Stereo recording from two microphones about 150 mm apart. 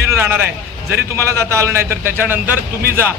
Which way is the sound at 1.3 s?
20° right (ahead or behind).